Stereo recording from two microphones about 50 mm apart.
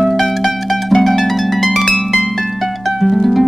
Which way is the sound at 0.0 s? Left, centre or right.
Centre.